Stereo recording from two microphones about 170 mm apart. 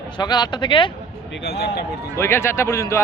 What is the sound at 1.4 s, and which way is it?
Speech, 75° left (ahead or behind).